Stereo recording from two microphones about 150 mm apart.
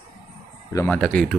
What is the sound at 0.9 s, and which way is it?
Speech, 5° left (ahead or behind).